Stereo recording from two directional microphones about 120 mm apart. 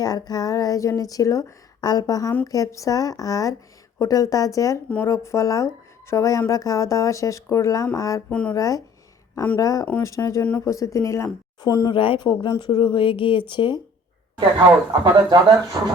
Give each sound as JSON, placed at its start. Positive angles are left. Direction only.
{"t": 0.0, "sound": "speech", "side_deg": 35}
{"t": 8.3, "sound": "speech", "side_deg": 10}
{"t": 8.5, "sound": "speech", "side_deg": 30}
{"t": 11.9, "sound": "speech", "side_deg": 45}
{"t": 14.3, "sound": "speech", "side_deg": -40}